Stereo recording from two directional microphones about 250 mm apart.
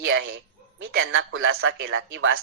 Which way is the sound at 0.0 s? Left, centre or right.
Right.